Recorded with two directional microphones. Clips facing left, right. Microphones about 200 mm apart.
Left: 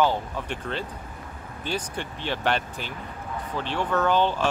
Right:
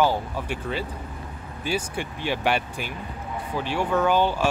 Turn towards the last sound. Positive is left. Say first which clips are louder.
# right 1 dB
turn(degrees=-10)  # may be behind; listen again after turning